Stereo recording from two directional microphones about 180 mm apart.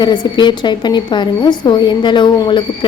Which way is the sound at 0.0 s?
25° left (ahead or behind).